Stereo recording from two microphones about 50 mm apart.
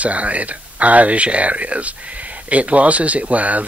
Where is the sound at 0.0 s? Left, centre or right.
Right.